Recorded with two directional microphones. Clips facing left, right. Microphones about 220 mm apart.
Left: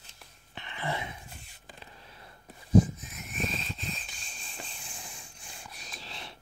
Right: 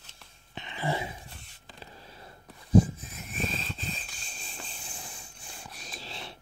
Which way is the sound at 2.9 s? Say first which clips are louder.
Right 1 dB; 30° right (ahead or behind).